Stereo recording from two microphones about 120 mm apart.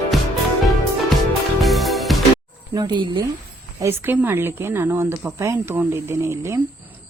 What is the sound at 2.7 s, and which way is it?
Speech, 35° right (ahead or behind).